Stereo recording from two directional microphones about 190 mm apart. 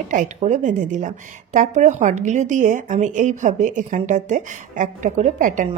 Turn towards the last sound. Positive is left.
turn(degrees=-40)  # may be behind; listen again after turning